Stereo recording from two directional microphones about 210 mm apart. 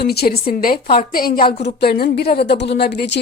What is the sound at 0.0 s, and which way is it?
A woman's voice, 50° left (ahead or behind).